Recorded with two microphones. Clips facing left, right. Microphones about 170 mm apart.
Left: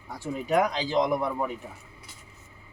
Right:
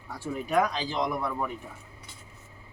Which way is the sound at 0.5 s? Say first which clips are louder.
Left 3 dB; 20° left (ahead or behind).